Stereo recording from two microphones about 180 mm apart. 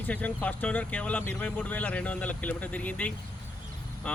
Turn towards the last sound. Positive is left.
turn(degrees=10)  # may be behind; listen again after turning